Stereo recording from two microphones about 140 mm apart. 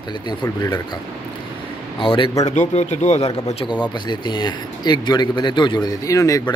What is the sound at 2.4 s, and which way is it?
Speech, 55° left (ahead or behind).